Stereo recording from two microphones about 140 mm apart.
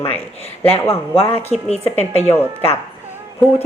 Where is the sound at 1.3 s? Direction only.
50° left (ahead or behind).